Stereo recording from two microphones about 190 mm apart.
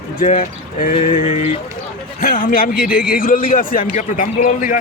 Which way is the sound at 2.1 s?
50° left (ahead or behind).